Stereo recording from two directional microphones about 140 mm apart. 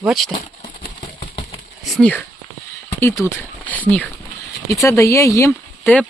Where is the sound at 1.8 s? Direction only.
5° left (ahead or behind).